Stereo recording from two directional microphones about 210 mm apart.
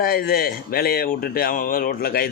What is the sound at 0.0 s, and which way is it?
Speech, 45° left (ahead or behind).